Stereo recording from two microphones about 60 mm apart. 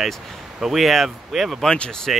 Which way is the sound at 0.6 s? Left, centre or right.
Centre.